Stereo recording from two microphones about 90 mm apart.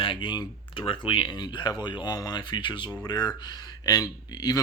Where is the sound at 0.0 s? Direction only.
65° left (ahead or behind).